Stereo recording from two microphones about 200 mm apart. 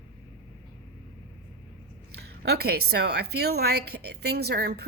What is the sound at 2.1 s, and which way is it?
A woman's voice, 55° right (ahead or behind).